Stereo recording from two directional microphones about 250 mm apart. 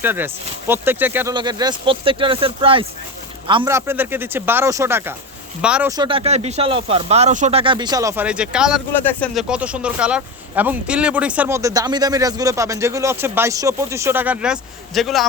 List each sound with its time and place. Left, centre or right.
0.0 s speech: centre
6.0 s speech: right; by 15.3 s centre